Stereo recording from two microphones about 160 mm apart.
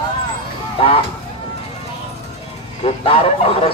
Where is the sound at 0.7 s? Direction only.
35° left (ahead or behind).